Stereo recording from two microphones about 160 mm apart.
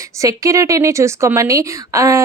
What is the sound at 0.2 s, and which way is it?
A woman's voice, 20° right (ahead or behind).